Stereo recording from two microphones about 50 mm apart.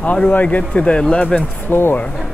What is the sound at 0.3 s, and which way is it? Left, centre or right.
Speech, left.